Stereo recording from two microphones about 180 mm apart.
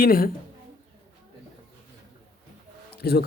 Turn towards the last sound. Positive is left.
turn(degrees=60)  # may be behind; listen again after turning